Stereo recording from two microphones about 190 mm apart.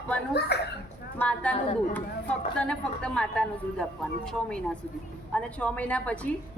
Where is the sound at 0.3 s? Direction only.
60° left (ahead or behind).